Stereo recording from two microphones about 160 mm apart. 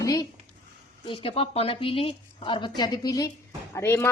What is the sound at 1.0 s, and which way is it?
A woman's voice, 35° left (ahead or behind).